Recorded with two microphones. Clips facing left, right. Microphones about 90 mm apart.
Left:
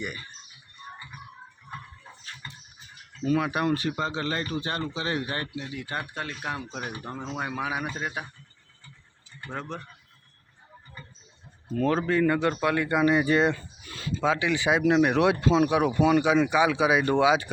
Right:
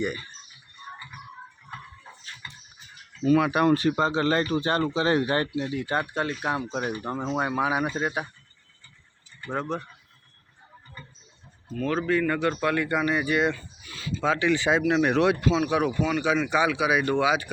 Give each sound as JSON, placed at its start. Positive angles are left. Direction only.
{"t": 0.0, "sound": "speech", "side_deg": -30}
{"t": 2.4, "sound": "a sound", "side_deg": 35}
{"t": 3.2, "sound": "speech", "side_deg": -80}
{"t": 3.7, "sound": "speech", "side_deg": -40}
{"t": 9.6, "sound": "mechanisms", "side_deg": -15}
{"t": 11.7, "sound": "speech", "side_deg": 35}
{"t": 13.8, "sound": "a sound", "side_deg": 45}
{"t": 14.2, "sound": "speech", "side_deg": 10}
{"t": 15.3, "sound": "speech", "side_deg": 25}
{"t": 16.6, "sound": "speech", "side_deg": 25}